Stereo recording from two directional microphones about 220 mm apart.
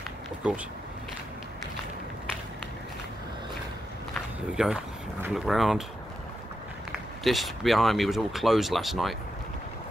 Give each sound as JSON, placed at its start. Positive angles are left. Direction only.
{"t": 4.6, "sound": "speech", "side_deg": -5}
{"t": 6.9, "sound": "speech", "side_deg": 0}